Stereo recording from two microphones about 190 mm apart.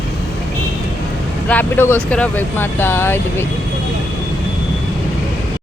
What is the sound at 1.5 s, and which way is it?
Speech, 10° left (ahead or behind).